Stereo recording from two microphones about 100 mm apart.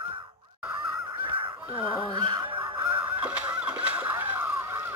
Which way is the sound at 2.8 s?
20° right (ahead or behind).